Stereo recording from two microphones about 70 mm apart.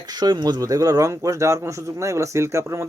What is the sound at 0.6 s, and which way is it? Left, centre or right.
Speech, right.